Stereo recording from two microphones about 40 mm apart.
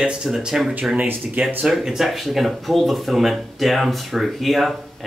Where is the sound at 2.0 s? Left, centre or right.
Centre.